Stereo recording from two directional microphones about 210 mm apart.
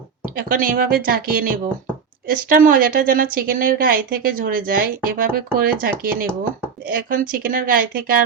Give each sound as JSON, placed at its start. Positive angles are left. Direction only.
{"t": 0.3, "sound": "a woman's voice", "side_deg": -40}